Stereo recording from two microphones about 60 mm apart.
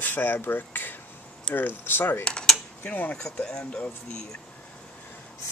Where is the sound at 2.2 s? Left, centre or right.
Centre.